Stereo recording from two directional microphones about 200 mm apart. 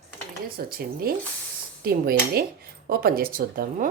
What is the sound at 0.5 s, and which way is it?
Speech, 50° right (ahead or behind).